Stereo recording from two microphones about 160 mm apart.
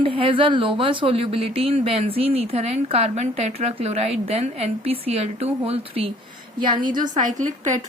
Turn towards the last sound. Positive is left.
turn(degrees=-50)  # may be behind; listen again after turning